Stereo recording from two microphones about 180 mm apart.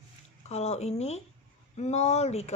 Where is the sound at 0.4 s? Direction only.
35° left (ahead or behind).